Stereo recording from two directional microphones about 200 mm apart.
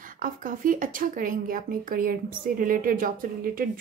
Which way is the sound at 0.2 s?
45° right (ahead or behind).